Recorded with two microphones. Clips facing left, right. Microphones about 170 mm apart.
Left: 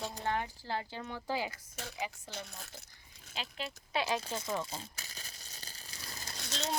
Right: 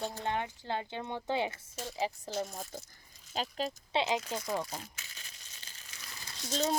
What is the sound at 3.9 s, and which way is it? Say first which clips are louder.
Speech: right 2 dB; 25° right (ahead or behind).